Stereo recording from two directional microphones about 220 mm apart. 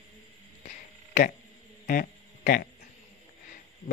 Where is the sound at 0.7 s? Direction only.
40° left (ahead or behind).